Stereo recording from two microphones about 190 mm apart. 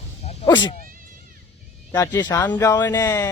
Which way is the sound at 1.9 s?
20° left (ahead or behind).